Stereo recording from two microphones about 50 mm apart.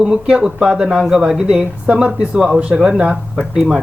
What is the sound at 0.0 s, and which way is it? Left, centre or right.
Speech, centre.